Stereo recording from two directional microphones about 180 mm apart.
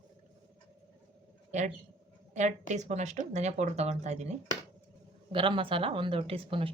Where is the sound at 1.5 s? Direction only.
40° right (ahead or behind).